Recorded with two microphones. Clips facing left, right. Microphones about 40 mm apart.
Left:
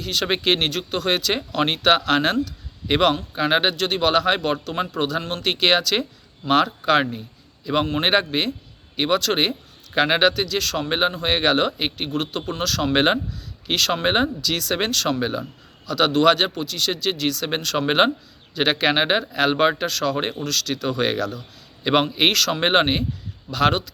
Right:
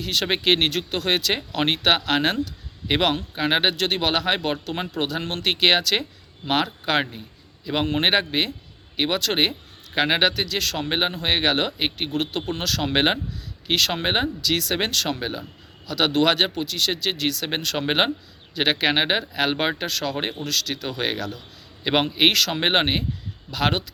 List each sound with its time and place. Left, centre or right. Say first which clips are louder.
0.0 s a man's voice: left 1 dB; centre
3.8 s speech: left 2 dB; right
4.1 s a man's voice: left 3 dB; centre
12.1 s a man's voice: even; right
20.8 s a man's voice: left 4 dB; centre